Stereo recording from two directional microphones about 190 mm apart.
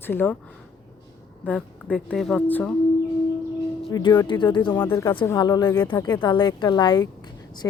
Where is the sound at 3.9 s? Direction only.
20° left (ahead or behind).